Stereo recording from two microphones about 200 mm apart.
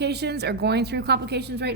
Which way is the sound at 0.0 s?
55° right (ahead or behind).